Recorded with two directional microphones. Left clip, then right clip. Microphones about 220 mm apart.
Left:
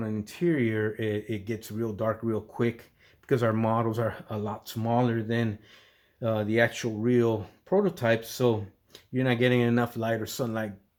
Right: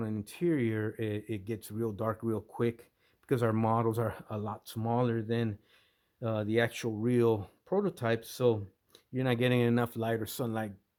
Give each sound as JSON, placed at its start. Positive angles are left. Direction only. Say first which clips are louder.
{"t": 0.0, "sound": "speech", "louder": "left 4 dB", "side_deg": -50}